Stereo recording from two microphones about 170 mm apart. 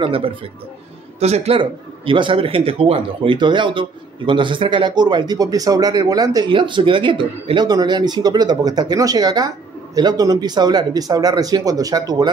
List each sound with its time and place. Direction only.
0.0 s a man's voice: 30° right (ahead or behind)